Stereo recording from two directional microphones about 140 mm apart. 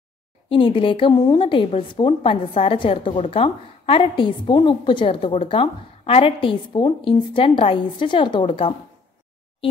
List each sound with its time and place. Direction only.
0.5 s speech: 40° left (ahead or behind)